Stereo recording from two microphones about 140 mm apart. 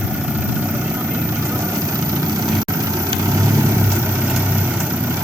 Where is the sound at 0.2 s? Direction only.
10° right (ahead or behind).